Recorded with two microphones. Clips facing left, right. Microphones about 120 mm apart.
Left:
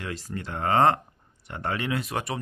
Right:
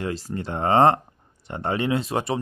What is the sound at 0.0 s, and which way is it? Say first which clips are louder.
Speech: right 6 dB; 30° right (ahead or behind).